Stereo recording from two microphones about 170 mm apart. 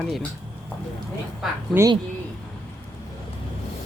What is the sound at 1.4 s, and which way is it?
Speech, centre (ahead or behind).